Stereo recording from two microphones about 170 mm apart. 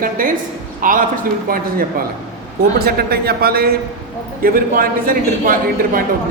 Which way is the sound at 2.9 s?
65° right (ahead or behind).